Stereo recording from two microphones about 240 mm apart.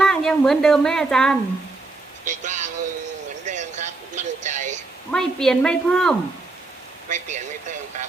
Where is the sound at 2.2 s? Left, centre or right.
Right.